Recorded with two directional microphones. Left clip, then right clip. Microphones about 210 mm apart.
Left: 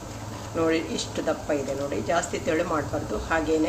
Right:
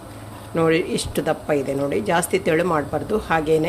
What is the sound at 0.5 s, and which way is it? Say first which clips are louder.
A woman's voice: right 6 dB; 55° right (ahead or behind).